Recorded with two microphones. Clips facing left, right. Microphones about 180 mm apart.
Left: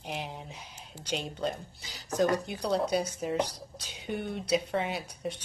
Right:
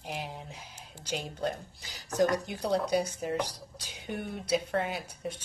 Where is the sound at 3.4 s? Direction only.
65° left (ahead or behind).